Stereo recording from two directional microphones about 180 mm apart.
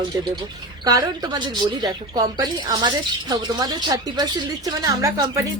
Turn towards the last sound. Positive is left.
turn(degrees=-20)  # may be behind; listen again after turning